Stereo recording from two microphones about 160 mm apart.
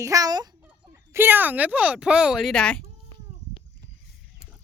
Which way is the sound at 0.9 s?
15° right (ahead or behind).